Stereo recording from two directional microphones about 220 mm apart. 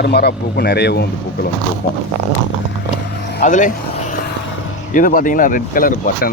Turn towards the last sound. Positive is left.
turn(degrees=40)  # may be behind; listen again after turning